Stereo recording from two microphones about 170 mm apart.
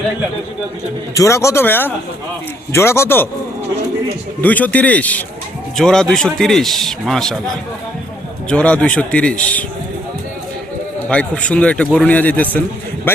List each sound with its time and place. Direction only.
1.1 s speech: 20° left (ahead or behind)
4.4 s a man's voice: 10° left (ahead or behind)
8.4 s speech: 5° left (ahead or behind)
11.1 s speech: 5° left (ahead or behind)